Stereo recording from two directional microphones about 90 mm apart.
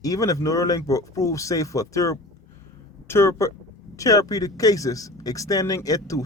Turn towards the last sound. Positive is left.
turn(degrees=40)  # may be behind; listen again after turning